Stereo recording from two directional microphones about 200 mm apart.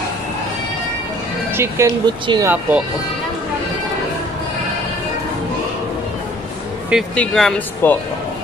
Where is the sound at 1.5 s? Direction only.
10° right (ahead or behind).